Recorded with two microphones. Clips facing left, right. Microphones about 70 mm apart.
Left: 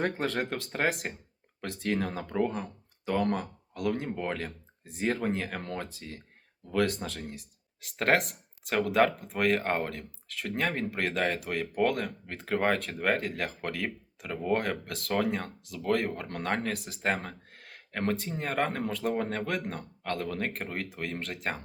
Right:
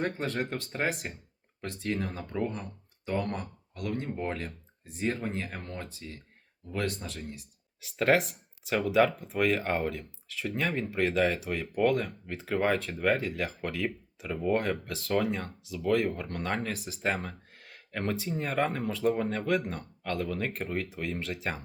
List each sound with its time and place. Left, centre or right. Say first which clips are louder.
0.0 s speech: left 1 dB; left
3.1 s speech: left 3 dB; left